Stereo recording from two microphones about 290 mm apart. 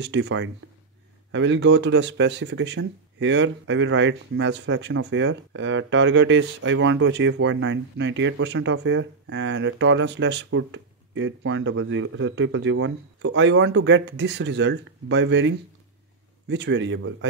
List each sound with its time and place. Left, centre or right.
0.0 s speech: right